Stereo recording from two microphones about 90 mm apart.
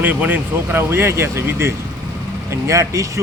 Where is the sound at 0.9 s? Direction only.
30° right (ahead or behind).